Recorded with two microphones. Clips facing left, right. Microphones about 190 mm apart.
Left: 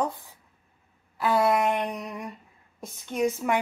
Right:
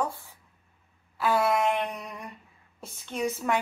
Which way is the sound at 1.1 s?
15° left (ahead or behind).